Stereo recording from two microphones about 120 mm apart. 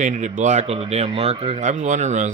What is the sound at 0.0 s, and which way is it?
Speech, 90° right.